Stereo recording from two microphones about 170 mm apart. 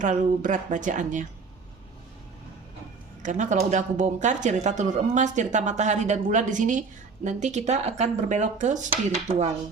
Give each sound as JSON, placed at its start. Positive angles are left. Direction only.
{"t": 0.0, "sound": "speech", "side_deg": -50}
{"t": 3.2, "sound": "speech", "side_deg": -45}